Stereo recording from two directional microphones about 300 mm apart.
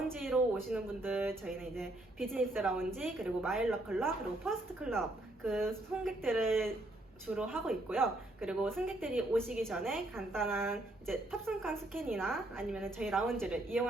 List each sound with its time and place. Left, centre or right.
0.2 s a woman's voice: centre